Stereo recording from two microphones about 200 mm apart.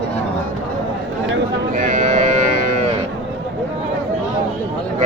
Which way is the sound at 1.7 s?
40° right (ahead or behind).